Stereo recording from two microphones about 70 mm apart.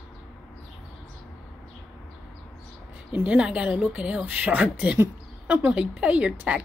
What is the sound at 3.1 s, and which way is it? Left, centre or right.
Speech, centre.